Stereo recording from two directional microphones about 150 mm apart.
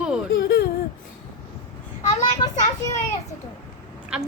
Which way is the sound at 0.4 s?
90° left.